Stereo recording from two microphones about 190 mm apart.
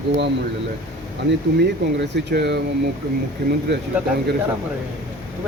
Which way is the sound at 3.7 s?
65° right (ahead or behind).